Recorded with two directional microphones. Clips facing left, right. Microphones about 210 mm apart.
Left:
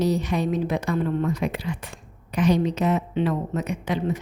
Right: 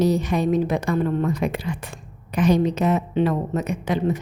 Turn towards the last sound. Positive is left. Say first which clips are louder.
# right 3 dB
turn(degrees=-45)  # may be behind; listen again after turning